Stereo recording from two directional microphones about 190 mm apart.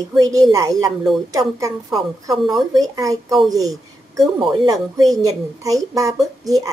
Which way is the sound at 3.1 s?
Centre (ahead or behind).